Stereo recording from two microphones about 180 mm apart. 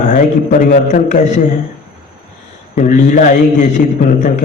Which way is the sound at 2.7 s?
45° left (ahead or behind).